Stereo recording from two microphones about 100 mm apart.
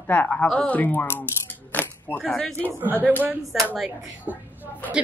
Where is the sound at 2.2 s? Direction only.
5° left (ahead or behind).